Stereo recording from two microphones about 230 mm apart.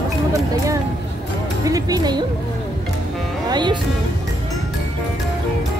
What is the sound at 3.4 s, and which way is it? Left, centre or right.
Music, centre.